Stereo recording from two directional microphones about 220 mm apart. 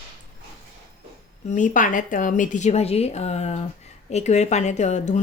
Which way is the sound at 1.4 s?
35° left (ahead or behind).